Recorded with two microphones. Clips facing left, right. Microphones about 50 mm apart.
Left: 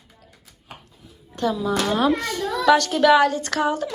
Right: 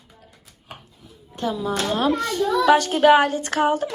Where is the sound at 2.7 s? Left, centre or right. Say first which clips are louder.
Even; centre.